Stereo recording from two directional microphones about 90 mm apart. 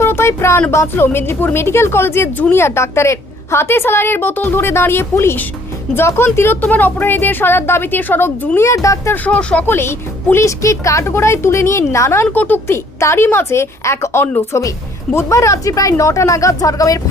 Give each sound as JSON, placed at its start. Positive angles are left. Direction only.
{"t": 0.0, "sound": "a sound", "side_deg": 30}
{"t": 0.7, "sound": "a woman's voice", "side_deg": 30}
{"t": 9.1, "sound": "speech", "side_deg": 15}
{"t": 9.6, "sound": "speech", "side_deg": 30}
{"t": 12.3, "sound": "a woman's voice", "side_deg": 20}